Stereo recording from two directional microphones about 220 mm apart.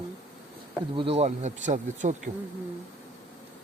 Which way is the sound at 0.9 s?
25° right (ahead or behind).